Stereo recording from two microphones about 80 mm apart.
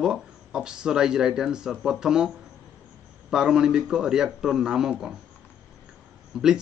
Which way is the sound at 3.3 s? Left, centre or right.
Centre.